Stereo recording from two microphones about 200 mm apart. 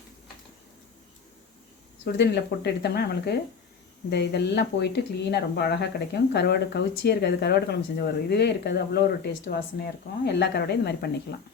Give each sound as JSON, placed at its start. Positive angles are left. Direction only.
{"t": 2.1, "sound": "speech", "side_deg": 55}